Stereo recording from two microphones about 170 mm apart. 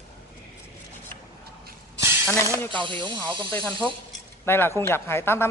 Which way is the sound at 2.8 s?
30° right (ahead or behind).